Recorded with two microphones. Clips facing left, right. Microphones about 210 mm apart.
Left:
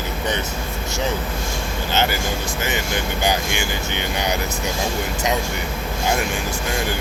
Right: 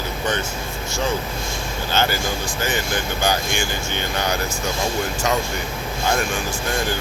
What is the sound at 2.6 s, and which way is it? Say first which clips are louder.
Speech: right 1 dB; 20° left (ahead or behind).